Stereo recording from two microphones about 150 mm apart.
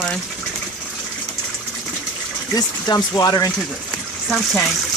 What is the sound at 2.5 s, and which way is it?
Speech, 25° left (ahead or behind).